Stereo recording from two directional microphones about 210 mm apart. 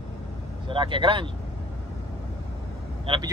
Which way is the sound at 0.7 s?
25° right (ahead or behind).